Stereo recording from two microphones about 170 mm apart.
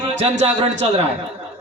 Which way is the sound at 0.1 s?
40° right (ahead or behind).